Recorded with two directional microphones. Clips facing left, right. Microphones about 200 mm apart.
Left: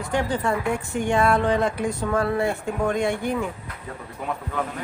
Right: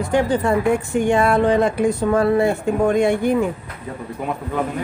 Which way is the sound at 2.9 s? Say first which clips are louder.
Right 7 dB; 15° right (ahead or behind).